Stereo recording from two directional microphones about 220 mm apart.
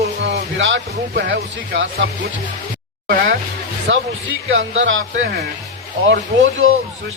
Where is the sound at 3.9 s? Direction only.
60° right (ahead or behind).